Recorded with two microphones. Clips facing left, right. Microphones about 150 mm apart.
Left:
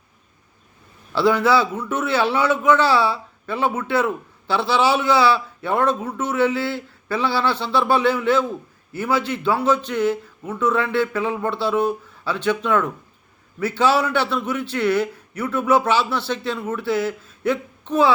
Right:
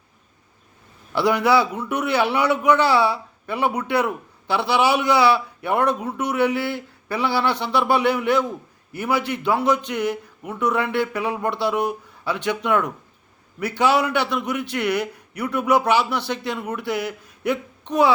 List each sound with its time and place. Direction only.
1.1 s a man's voice: 20° right (ahead or behind)